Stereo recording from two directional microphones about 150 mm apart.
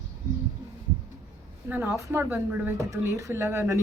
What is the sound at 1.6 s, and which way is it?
A woman's voice, 10° right (ahead or behind).